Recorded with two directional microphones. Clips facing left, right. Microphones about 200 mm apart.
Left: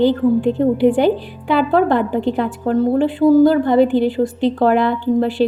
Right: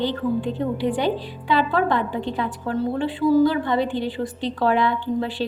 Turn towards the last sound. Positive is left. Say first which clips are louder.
# left 6 dB
turn(degrees=50)  # may be behind; listen again after turning